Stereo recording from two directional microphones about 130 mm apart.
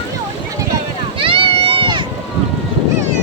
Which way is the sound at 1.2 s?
45° right (ahead or behind).